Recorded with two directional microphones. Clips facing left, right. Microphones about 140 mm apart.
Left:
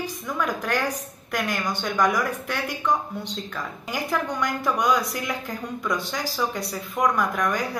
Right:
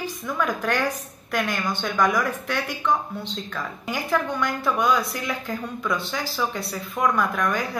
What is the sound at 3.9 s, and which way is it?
Speech, 15° left (ahead or behind).